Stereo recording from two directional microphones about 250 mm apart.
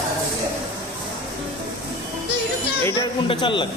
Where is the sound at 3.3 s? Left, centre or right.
Centre.